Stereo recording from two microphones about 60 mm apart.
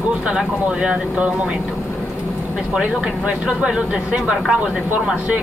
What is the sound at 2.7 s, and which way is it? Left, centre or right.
Speech, centre.